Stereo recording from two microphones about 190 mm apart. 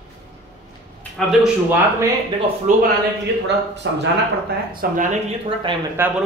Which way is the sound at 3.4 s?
65° right (ahead or behind).